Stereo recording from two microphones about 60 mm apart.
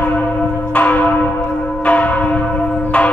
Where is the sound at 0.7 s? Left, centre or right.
Left.